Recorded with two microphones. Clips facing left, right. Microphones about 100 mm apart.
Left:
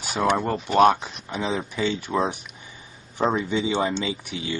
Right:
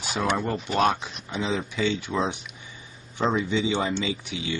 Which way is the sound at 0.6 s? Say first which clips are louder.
Left 7 dB; 50° left (ahead or behind).